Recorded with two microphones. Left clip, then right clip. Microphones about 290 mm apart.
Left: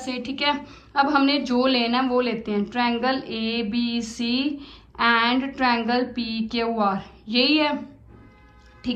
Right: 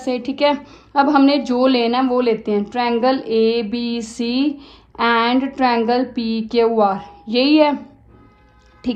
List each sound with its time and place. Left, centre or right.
0.0 s a woman's voice: centre